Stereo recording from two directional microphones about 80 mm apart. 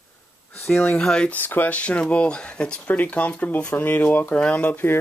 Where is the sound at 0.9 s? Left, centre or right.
Centre.